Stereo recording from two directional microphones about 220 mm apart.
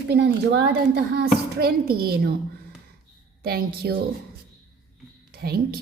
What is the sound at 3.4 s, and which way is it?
Speech, 45° right (ahead or behind).